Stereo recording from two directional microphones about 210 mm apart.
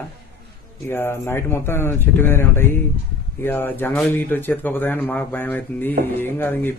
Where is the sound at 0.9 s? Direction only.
10° left (ahead or behind).